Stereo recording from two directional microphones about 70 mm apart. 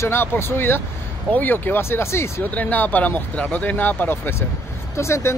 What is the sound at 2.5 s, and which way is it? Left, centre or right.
Speech, left.